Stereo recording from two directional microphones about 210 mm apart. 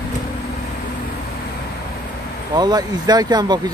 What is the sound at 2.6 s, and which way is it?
Speech, 20° right (ahead or behind).